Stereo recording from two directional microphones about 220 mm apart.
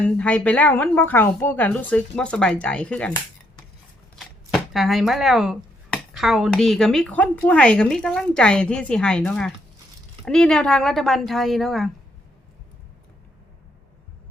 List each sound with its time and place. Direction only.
0.0 s a woman's voice: 5° left (ahead or behind)